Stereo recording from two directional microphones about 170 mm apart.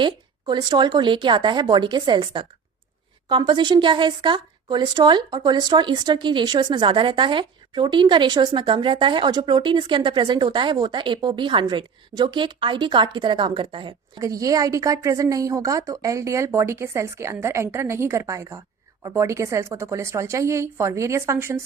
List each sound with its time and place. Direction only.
0.0 s a woman's voice: 25° right (ahead or behind)